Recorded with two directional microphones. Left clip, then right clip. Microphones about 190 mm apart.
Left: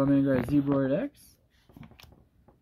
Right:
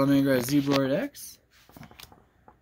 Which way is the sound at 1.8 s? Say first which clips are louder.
Right 5 dB; centre (ahead or behind).